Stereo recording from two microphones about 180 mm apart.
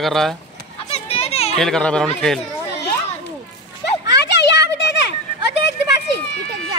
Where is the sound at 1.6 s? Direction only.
5° left (ahead or behind).